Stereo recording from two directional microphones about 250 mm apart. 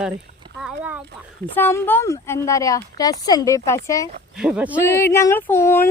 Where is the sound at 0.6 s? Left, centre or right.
Centre.